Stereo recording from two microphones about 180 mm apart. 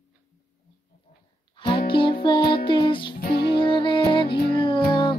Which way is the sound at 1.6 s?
30° left (ahead or behind).